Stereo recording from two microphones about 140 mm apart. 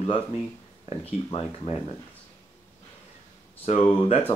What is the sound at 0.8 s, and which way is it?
Speech, 45° left (ahead or behind).